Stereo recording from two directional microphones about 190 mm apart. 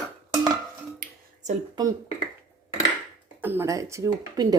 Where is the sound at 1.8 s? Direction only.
25° right (ahead or behind).